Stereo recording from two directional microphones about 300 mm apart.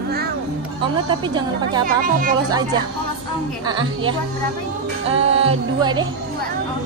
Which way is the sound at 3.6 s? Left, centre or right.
Centre.